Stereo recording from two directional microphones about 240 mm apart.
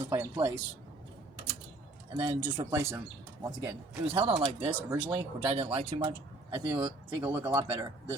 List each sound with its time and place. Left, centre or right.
0.0 s speech: centre
2.1 s speech: right
4.4 s speech: centre
5.0 s speech: right